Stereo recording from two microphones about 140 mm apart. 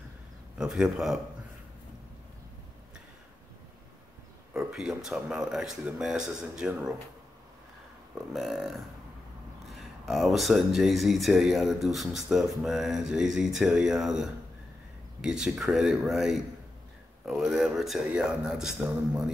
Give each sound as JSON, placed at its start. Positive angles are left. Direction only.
{"t": 0.6, "sound": "speech", "side_deg": -5}
{"t": 4.6, "sound": "speech", "side_deg": -5}
{"t": 8.1, "sound": "speech", "side_deg": 0}